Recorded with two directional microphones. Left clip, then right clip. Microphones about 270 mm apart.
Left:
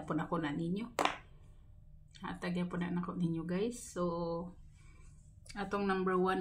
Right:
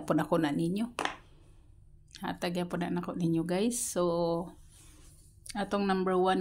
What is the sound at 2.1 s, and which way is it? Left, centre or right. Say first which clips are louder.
Speech: right 7 dB; right.